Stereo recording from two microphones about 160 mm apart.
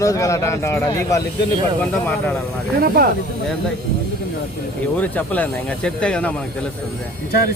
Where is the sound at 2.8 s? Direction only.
70° right (ahead or behind).